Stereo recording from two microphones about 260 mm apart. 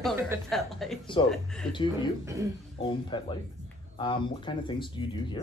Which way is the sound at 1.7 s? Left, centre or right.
Centre.